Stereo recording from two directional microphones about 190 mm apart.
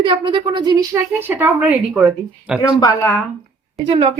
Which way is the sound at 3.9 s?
35° right (ahead or behind).